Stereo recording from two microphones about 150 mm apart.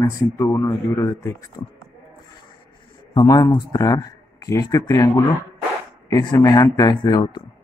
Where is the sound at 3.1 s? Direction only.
25° left (ahead or behind).